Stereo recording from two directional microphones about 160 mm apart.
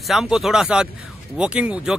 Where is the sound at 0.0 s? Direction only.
Centre (ahead or behind).